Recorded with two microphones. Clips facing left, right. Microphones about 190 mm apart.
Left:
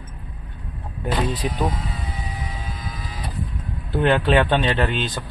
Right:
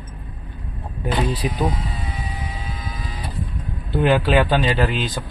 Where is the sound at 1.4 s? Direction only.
10° right (ahead or behind).